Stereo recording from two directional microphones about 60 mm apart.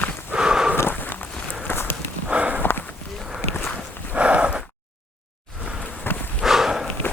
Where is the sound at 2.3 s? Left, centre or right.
Right.